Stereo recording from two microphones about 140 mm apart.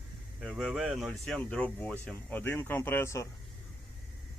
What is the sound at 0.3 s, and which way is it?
Speech, 5° right (ahead or behind).